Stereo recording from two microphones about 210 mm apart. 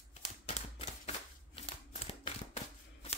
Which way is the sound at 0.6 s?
30° left (ahead or behind).